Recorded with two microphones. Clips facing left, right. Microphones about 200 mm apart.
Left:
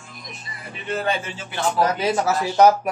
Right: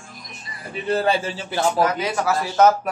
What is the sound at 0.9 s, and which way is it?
Speech, 35° right (ahead or behind).